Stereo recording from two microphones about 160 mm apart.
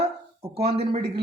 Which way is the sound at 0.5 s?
40° right (ahead or behind).